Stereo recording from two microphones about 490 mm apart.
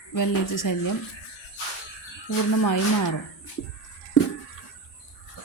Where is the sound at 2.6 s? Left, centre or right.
Left.